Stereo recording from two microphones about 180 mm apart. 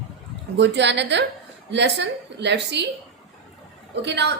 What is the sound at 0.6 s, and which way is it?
Speech, 75° right (ahead or behind).